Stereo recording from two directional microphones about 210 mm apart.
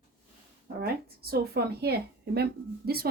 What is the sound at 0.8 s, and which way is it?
A woman's voice, 45° right (ahead or behind).